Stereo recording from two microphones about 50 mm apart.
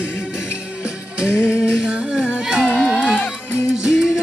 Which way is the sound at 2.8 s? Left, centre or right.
Centre.